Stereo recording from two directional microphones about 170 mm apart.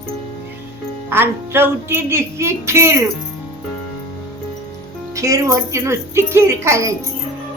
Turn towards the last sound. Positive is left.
turn(degrees=-20)  # may be behind; listen again after turning